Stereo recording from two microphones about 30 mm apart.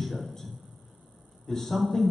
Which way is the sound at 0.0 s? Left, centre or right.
Centre.